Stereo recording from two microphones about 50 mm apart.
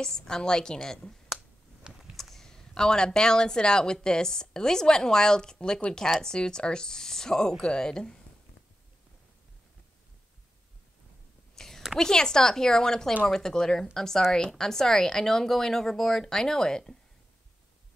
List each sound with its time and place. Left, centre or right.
0.0 s speech: centre
2.1 s speech: centre
11.5 s whispering: centre
12.0 s speech: centre